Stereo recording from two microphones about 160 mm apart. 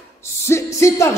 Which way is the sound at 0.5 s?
15° left (ahead or behind).